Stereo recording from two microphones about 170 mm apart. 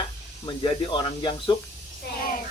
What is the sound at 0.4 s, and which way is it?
Speech, 30° left (ahead or behind).